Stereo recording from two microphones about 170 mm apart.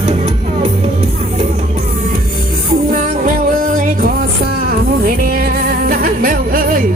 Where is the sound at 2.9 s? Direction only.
50° right (ahead or behind).